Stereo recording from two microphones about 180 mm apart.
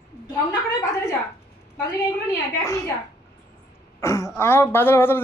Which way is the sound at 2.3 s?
15° left (ahead or behind).